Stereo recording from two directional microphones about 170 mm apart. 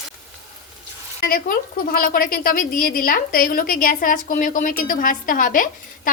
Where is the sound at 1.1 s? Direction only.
60° left (ahead or behind).